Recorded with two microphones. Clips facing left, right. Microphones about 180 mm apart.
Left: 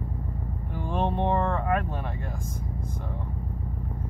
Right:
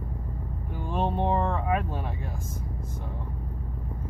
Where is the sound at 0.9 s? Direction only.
5° right (ahead or behind).